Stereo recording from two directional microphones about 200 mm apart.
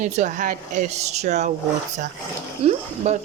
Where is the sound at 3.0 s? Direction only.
35° right (ahead or behind).